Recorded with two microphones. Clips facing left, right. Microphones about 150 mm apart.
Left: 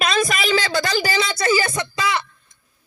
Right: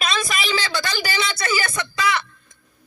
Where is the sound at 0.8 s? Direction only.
30° left (ahead or behind).